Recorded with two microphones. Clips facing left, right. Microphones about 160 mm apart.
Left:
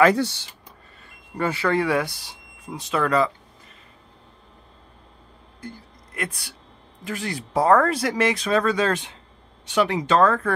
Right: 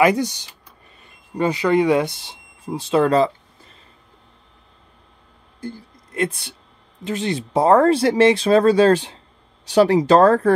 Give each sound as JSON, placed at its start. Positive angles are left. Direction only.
{"t": 0.0, "sound": "speech", "side_deg": -15}
{"t": 5.6, "sound": "a sound", "side_deg": -30}
{"t": 7.1, "sound": "speech", "side_deg": -25}